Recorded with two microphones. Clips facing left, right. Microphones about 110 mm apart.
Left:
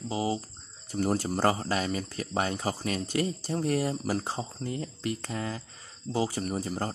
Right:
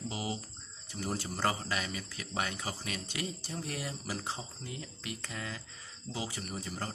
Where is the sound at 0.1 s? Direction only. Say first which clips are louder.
Left 11 dB; 30° left (ahead or behind).